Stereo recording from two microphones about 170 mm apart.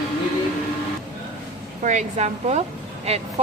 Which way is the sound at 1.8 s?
45° right (ahead or behind).